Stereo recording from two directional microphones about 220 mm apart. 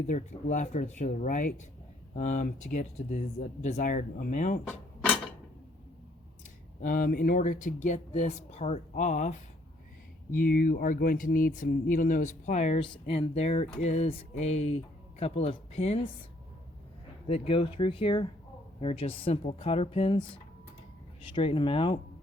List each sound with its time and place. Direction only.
0.1 s speech: 35° left (ahead or behind)
6.8 s speech: 40° left (ahead or behind)
10.3 s speech: 40° left (ahead or behind)
17.2 s speech: 25° left (ahead or behind)
21.3 s speech: 25° left (ahead or behind)